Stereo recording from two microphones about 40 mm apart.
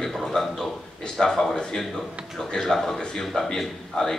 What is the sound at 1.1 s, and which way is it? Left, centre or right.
A man's voice, centre.